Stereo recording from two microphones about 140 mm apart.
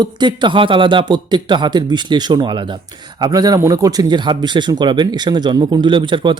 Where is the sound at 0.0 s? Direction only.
30° right (ahead or behind).